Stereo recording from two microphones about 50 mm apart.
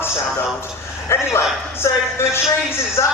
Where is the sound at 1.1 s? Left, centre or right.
Left.